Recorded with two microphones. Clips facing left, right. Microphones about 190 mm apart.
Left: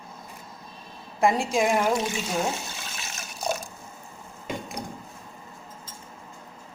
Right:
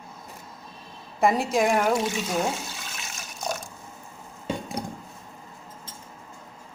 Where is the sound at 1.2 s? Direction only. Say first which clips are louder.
Right 1 dB; centre (ahead or behind).